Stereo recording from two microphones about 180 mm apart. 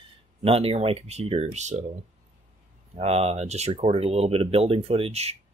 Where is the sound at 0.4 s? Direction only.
30° right (ahead or behind).